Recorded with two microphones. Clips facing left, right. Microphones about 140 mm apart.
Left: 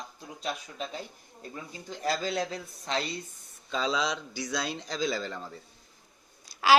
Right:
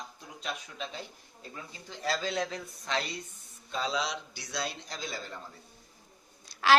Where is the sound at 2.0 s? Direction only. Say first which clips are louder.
Left 2 dB; 45° left (ahead or behind).